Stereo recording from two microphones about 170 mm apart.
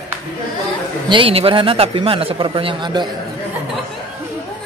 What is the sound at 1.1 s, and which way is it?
A man's voice, 30° right (ahead or behind).